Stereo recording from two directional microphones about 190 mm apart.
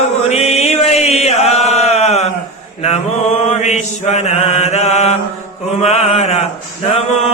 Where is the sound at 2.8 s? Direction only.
35° left (ahead or behind).